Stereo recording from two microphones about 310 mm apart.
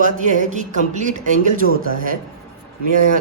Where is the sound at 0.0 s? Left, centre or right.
Right.